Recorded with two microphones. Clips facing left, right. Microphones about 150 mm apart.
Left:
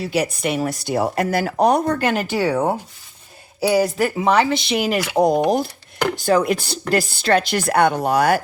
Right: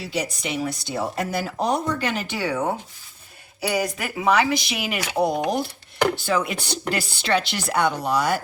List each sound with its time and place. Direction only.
0.0 s a woman's voice: 60° left (ahead or behind)